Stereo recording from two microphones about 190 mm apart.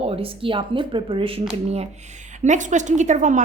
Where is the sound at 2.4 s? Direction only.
40° right (ahead or behind).